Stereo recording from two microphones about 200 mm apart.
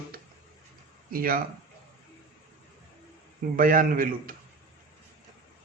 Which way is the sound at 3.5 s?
45° right (ahead or behind).